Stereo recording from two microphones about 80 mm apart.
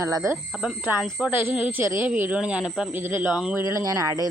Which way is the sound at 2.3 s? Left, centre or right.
Centre.